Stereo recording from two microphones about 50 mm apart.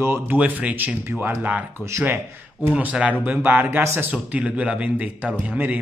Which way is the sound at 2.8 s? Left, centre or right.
Right.